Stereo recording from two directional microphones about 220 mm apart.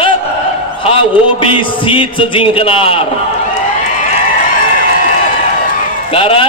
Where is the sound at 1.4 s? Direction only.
25° left (ahead or behind).